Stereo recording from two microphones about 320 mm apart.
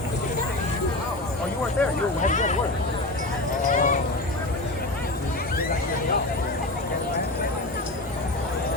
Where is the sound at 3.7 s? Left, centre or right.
Left.